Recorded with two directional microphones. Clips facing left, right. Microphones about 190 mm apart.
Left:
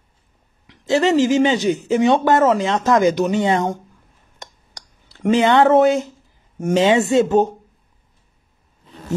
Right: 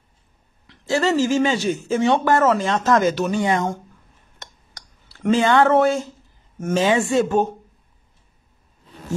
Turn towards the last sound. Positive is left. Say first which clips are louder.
# left 4 dB
turn(degrees=20)  # may be behind; listen again after turning